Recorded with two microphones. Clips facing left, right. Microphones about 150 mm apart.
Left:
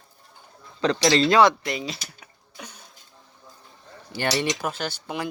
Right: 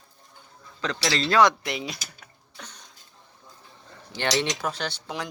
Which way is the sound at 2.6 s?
10° left (ahead or behind).